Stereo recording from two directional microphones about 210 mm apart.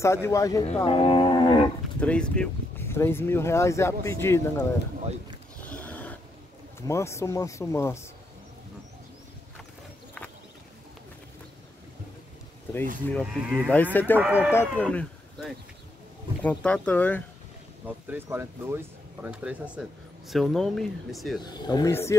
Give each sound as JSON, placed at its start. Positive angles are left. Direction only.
{"t": 0.0, "sound": "speech", "side_deg": 15}
{"t": 2.0, "sound": "speech", "side_deg": 5}
{"t": 5.6, "sound": "a sound", "side_deg": 5}
{"t": 6.9, "sound": "speech", "side_deg": 15}
{"t": 13.1, "sound": "speech", "side_deg": 0}
{"t": 13.9, "sound": "speech", "side_deg": 10}
{"t": 14.2, "sound": "speech", "side_deg": -5}
{"t": 14.5, "sound": "speech", "side_deg": 10}
{"t": 17.8, "sound": "speech", "side_deg": -10}
{"t": 21.4, "sound": "speech", "side_deg": 20}